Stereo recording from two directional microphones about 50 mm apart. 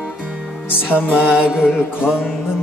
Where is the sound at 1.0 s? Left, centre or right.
Centre.